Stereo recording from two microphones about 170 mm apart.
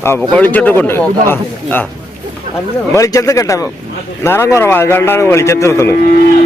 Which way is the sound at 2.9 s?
20° left (ahead or behind).